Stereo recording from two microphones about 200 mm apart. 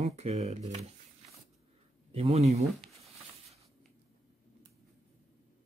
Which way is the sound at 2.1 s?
30° right (ahead or behind).